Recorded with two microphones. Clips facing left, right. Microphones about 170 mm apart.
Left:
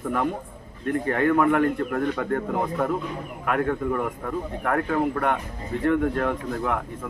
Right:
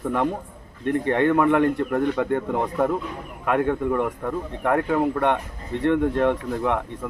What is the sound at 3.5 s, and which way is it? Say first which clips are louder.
Speech: right 3 dB; 25° right (ahead or behind).